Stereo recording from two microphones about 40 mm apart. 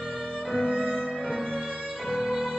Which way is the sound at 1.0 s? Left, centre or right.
Centre.